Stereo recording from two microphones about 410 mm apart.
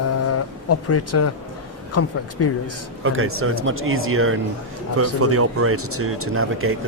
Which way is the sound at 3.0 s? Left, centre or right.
Right.